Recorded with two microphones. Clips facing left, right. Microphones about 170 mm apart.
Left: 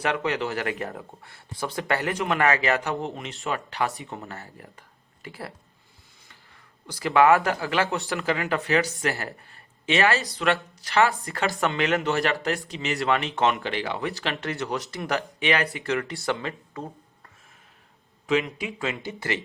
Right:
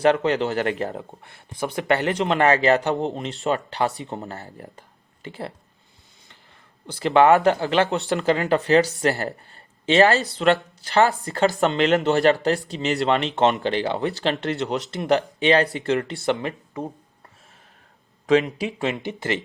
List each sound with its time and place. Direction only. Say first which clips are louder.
0.0 s speech: right 7 dB; 30° right (ahead or behind)
7.0 s speech: right 4 dB; 25° right (ahead or behind)
18.3 s speech: right 6 dB; 35° right (ahead or behind)